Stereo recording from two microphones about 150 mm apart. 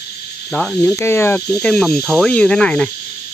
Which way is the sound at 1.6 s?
5° left (ahead or behind).